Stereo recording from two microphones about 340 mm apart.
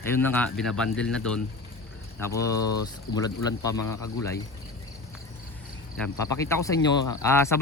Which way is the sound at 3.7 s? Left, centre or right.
Left.